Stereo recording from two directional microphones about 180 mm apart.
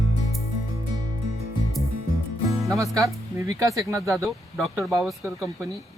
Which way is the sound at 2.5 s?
15° right (ahead or behind).